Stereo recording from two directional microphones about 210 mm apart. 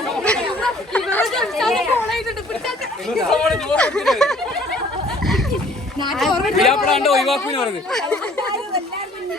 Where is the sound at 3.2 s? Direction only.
Centre (ahead or behind).